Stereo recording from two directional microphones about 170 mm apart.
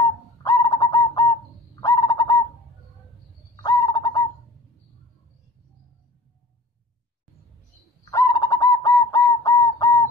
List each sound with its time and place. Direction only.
0.4 s bird: 20° left (ahead or behind)
3.6 s bird: 20° left (ahead or behind)
8.0 s bird: 20° left (ahead or behind)